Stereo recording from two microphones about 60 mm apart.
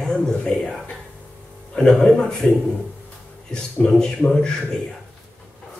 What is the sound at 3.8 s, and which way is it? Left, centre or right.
Speech, centre.